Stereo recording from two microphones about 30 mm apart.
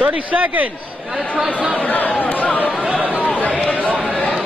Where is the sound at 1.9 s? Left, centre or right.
Left.